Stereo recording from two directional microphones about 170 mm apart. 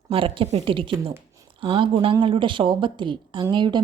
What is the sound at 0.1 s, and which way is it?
A woman's voice, 35° right (ahead or behind).